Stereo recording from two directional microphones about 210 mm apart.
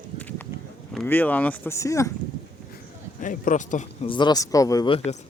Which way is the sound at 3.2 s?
40° left (ahead or behind).